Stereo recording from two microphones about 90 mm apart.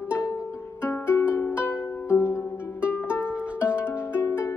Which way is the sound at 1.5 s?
15° right (ahead or behind).